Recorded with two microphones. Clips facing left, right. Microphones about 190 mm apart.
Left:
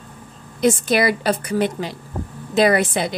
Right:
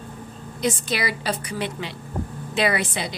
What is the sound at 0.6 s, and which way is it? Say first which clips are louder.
Speech: left 8 dB; 50° left (ahead or behind).